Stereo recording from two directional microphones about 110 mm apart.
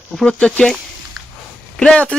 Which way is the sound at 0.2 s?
10° left (ahead or behind).